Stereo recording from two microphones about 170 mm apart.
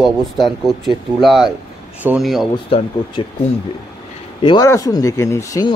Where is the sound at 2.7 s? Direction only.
35° left (ahead or behind).